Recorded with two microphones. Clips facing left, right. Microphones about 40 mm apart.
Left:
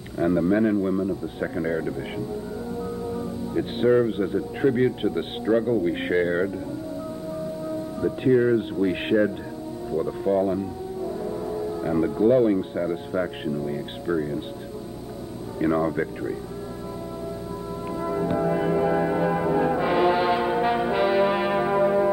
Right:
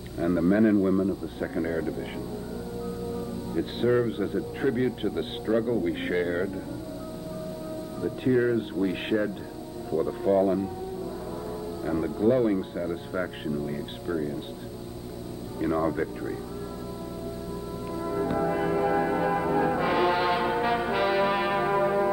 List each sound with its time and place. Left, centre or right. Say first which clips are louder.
0.3 s a man's voice: even; centre
3.1 s music: left 3 dB; centre
4.1 s a man's voice: left 3 dB; centre
8.0 s a man's voice: left 4 dB; centre
9.8 s music: left 1 dB; centre
11.7 s a man's voice: left 4 dB; centre
12.7 s speech: left 4 dB; centre
13.1 s a man's voice: left 4 dB; centre
14.0 s a man's voice: left 4 dB; centre
15.8 s a man's voice: left 2 dB; centre
17.8 s music: left 3 dB; centre
18.2 s brass instrument: left 2 dB; centre